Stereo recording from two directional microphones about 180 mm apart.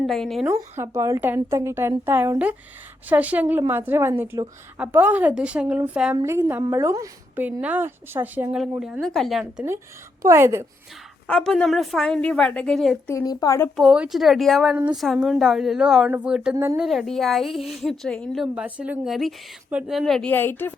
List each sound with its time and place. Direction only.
0.0 s a woman's voice: centre (ahead or behind)
0.4 s a woman's voice: 15° right (ahead or behind)
11.3 s a woman's voice: 5° left (ahead or behind)
13.1 s a woman's voice: 20° left (ahead or behind)
13.7 s a woman's voice: 5° right (ahead or behind)
16.8 s a woman's voice: centre (ahead or behind)
18.5 s a woman's voice: 5° right (ahead or behind); by 20.7 s 10° left (ahead or behind)